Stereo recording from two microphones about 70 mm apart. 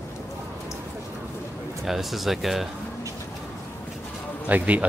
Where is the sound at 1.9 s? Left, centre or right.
Centre.